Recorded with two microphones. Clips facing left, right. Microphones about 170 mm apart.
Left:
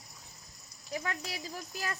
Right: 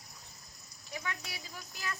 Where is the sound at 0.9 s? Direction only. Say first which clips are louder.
Left 4 dB; 40° left (ahead or behind).